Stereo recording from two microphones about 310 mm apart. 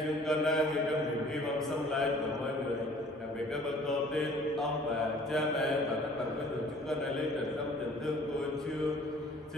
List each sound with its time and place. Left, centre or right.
0.3 s mantra: centre
4.1 s mantra: centre